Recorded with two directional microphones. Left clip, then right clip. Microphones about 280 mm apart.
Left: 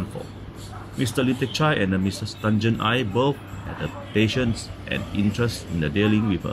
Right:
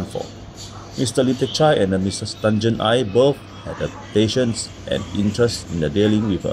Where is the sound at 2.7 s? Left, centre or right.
Centre.